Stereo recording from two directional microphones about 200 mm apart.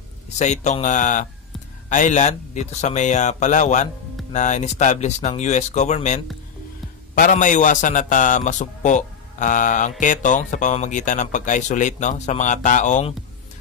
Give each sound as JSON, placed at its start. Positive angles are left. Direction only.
{"t": 0.4, "sound": "a man's voice", "side_deg": 35}